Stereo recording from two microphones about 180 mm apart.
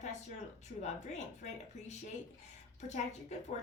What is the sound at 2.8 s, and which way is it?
Speech, 40° left (ahead or behind).